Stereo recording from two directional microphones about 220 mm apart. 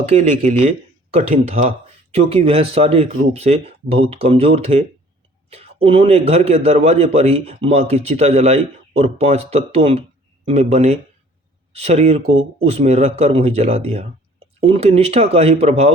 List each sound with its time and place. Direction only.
0.0 s a man's voice: 30° right (ahead or behind)
12.2 s speech: 65° right (ahead or behind)
12.5 s a man's voice: 25° right (ahead or behind)